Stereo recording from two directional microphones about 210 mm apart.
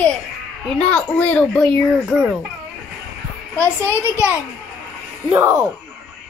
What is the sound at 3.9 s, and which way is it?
Speech, 15° left (ahead or behind).